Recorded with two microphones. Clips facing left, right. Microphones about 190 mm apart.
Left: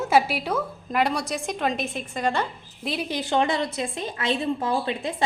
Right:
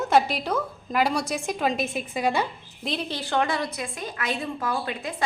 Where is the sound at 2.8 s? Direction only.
5° left (ahead or behind).